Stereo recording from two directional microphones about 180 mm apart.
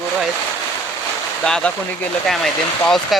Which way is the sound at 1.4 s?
5° left (ahead or behind).